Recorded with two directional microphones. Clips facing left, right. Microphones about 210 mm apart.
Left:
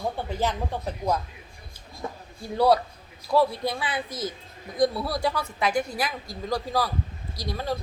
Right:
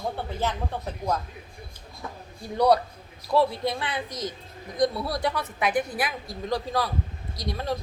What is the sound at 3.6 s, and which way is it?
Speech, centre (ahead or behind).